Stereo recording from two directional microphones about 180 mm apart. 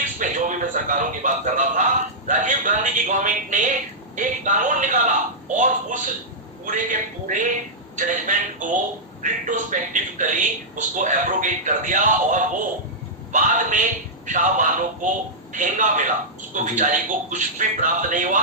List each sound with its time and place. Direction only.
0.2 s speech: 45° right (ahead or behind)